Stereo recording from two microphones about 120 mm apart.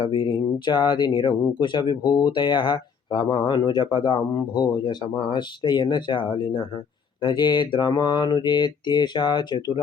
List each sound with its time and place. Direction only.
0.0 s mantra: 40° left (ahead or behind)